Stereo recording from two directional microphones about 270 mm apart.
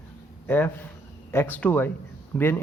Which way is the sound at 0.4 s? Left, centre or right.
Centre.